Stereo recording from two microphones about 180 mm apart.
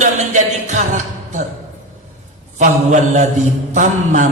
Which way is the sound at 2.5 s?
40° right (ahead or behind).